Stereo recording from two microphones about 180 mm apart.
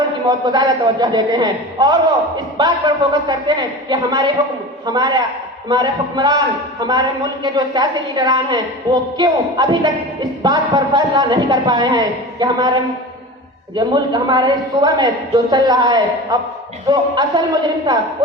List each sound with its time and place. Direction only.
0.3 s a woman's voice: 25° right (ahead or behind)
13.7 s a woman's voice: 25° right (ahead or behind)